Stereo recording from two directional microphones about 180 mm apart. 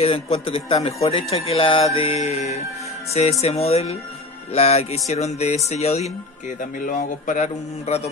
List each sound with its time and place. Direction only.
0.0 s a man's voice: 30° left (ahead or behind)
6.6 s a man's voice: 45° left (ahead or behind)